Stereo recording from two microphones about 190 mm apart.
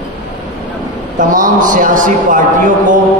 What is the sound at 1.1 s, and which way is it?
A man's voice, 45° right (ahead or behind).